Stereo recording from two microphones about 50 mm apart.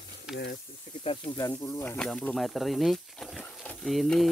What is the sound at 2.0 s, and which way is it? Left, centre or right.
Speech, centre.